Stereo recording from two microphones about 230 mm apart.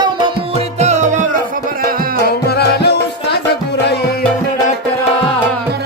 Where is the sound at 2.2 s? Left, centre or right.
Left.